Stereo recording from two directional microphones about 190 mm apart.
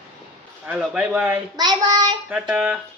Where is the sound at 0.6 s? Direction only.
5° right (ahead or behind).